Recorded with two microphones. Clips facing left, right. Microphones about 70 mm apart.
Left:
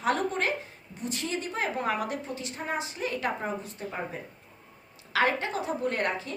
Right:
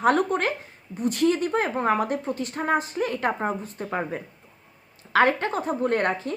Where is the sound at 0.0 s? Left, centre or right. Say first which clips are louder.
Right 6 dB; right.